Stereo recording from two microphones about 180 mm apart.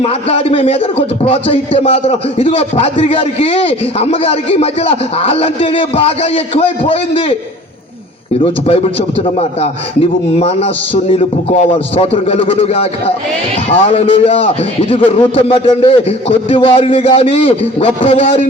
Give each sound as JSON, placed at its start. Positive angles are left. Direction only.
{"t": 0.0, "sound": "a man's voice", "side_deg": 35}
{"t": 8.6, "sound": "a man's voice", "side_deg": 30}